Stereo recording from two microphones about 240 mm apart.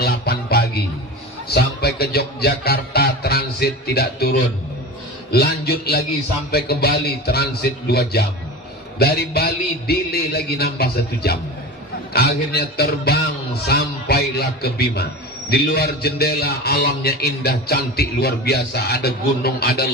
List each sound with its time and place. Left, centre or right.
0.0 s music: left
1.5 s a man's voice: left